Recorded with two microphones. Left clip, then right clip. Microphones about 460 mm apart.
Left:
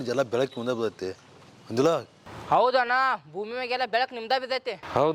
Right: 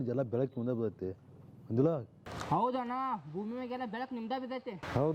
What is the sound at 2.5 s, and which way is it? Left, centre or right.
Speech, left.